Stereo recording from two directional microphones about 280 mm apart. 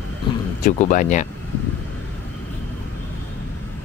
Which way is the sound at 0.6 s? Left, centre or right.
Left.